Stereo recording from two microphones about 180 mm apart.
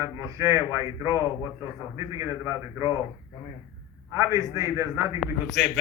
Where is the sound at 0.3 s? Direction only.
15° right (ahead or behind).